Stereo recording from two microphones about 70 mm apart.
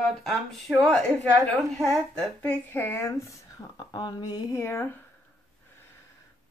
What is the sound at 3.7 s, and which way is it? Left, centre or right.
Speech, left.